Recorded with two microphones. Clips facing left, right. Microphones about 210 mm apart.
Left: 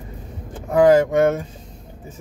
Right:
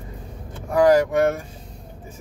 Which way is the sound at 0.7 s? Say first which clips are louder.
Left 2 dB; 25° left (ahead or behind).